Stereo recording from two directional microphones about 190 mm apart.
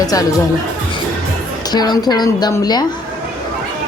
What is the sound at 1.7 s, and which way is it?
A woman's voice, 20° left (ahead or behind).